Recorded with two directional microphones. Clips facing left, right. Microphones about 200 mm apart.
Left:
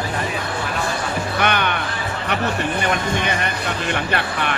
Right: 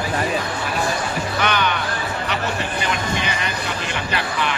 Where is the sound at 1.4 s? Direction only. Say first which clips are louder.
Even; 55° left (ahead or behind).